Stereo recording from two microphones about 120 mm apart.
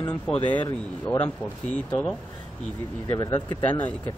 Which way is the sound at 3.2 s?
35° left (ahead or behind).